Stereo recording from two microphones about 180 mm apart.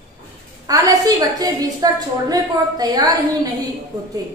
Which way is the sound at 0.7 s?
20° right (ahead or behind).